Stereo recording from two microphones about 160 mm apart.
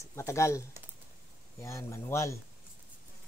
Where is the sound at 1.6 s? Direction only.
20° left (ahead or behind).